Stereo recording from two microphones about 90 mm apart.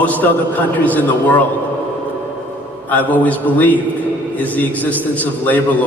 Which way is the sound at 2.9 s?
20° left (ahead or behind).